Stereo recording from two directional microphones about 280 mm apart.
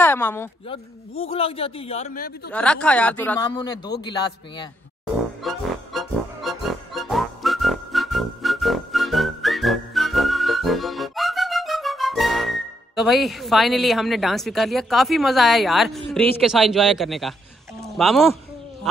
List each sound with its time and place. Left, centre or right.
0.0 s speech: centre
0.7 s a man's voice: centre
2.5 s speech: centre
5.4 s music: centre
16.1 s speech: centre